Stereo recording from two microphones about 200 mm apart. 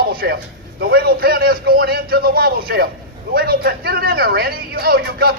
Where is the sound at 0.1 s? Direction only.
50° right (ahead or behind).